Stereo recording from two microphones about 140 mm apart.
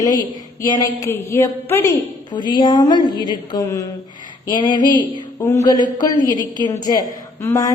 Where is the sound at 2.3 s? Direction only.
30° left (ahead or behind).